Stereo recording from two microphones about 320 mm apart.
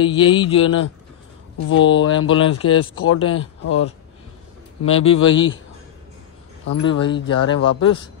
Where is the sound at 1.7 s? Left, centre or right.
Left.